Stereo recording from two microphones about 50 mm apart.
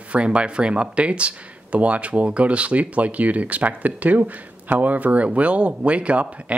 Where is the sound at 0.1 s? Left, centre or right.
Right.